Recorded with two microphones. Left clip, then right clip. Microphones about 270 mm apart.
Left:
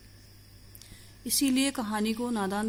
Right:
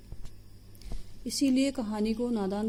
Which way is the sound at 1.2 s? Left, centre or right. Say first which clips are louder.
Even; left.